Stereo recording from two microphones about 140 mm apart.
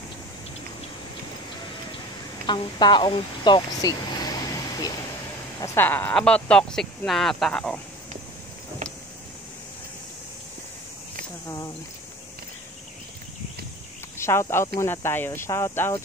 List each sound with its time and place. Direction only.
2.4 s speech: 35° left (ahead or behind)
5.8 s speech: 15° left (ahead or behind)
11.4 s speech: 25° left (ahead or behind)
14.1 s speech: 20° left (ahead or behind)